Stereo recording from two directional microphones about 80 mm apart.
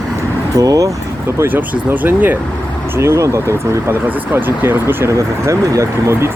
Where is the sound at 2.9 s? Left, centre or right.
Right.